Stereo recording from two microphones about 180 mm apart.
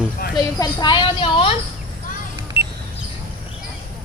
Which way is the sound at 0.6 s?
25° left (ahead or behind).